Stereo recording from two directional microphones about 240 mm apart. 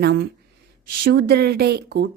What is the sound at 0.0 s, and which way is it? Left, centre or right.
A woman's voice, right.